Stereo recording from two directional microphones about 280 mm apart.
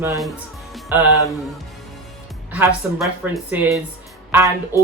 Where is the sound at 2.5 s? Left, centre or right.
Centre.